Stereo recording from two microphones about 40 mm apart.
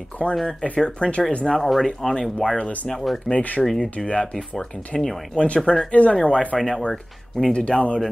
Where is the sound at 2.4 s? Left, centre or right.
Left.